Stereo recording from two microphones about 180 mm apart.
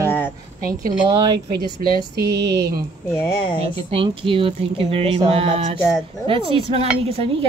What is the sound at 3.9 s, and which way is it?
Speech, 30° right (ahead or behind).